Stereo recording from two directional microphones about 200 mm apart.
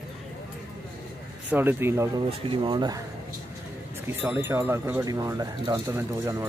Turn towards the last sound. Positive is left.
turn(degrees=-15)  # may be behind; listen again after turning